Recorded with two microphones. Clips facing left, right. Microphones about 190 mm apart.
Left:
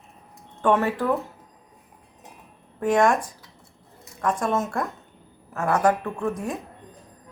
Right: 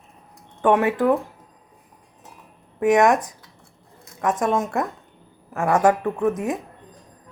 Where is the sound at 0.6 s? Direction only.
15° right (ahead or behind).